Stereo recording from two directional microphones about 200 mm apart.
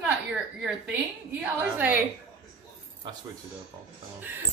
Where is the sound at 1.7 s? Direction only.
10° right (ahead or behind).